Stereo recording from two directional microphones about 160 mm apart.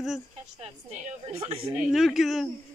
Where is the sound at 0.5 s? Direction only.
40° right (ahead or behind).